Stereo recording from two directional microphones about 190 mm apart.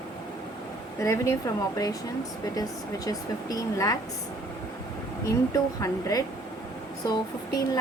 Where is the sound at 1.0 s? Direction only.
15° left (ahead or behind).